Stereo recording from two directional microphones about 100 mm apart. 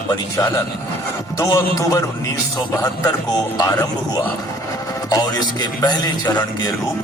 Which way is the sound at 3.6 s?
35° left (ahead or behind).